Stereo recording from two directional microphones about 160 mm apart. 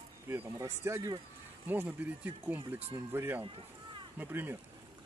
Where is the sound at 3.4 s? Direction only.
35° right (ahead or behind).